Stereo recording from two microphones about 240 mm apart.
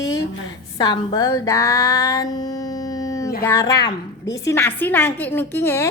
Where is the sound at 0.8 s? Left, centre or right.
Centre.